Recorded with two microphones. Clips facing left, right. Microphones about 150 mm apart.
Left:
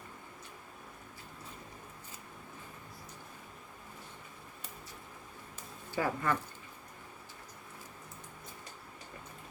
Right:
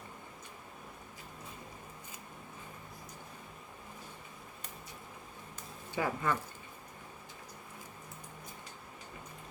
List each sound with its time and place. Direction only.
5.9 s speech: 15° right (ahead or behind)